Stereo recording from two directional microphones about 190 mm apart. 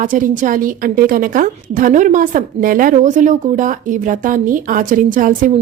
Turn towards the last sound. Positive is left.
turn(degrees=-45)  # may be behind; listen again after turning